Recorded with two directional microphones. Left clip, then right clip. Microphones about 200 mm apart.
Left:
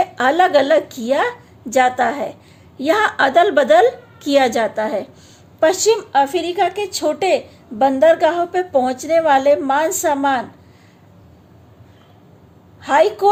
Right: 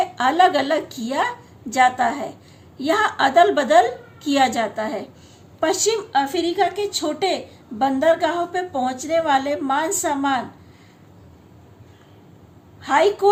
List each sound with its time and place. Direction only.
0.0 s a woman's voice: 45° left (ahead or behind)
12.8 s a woman's voice: 40° left (ahead or behind)